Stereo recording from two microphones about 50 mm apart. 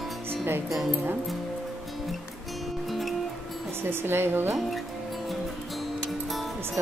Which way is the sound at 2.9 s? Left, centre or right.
Centre.